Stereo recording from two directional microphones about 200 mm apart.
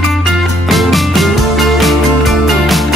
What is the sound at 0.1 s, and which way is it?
Music, centre (ahead or behind).